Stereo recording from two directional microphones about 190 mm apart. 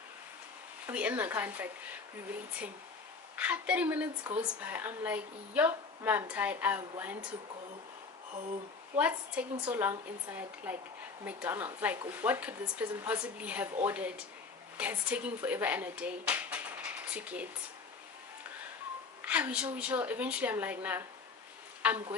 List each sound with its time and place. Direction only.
0.9 s a woman's voice: 10° right (ahead or behind)
9.0 s a woman's voice: 5° right (ahead or behind)
19.2 s a woman's voice: 5° right (ahead or behind)
21.8 s a sound: 10° right (ahead or behind)